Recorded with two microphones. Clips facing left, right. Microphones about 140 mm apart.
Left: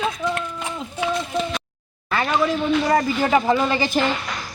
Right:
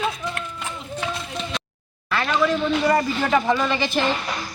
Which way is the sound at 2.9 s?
15° left (ahead or behind).